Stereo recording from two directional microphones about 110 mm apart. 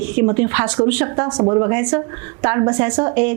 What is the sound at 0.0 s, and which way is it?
A woman's voice, 20° right (ahead or behind).